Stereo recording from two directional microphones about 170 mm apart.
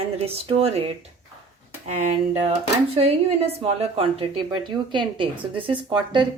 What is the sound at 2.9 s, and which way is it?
A woman's voice, 35° right (ahead or behind).